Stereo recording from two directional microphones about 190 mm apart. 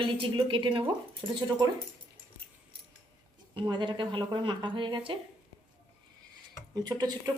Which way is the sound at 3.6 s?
25° right (ahead or behind).